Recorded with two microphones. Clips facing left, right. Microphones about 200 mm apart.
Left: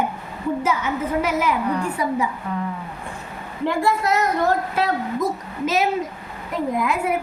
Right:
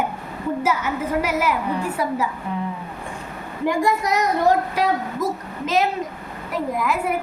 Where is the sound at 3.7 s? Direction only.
15° right (ahead or behind).